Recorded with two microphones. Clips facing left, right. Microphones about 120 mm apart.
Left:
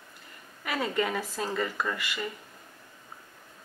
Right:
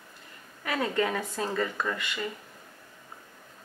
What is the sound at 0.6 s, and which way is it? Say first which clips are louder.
Speech: right 1 dB; 5° left (ahead or behind).